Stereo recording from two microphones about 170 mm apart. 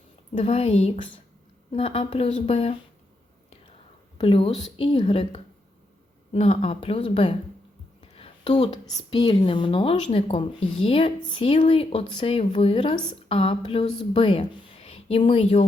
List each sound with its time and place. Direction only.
0.3 s speech: 35° left (ahead or behind)
4.2 s speech: 30° left (ahead or behind)
8.0 s a sound: 35° left (ahead or behind)
9.0 s speech: 30° left (ahead or behind)